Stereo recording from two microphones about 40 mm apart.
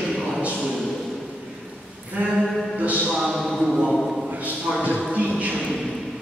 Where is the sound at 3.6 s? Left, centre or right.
Centre.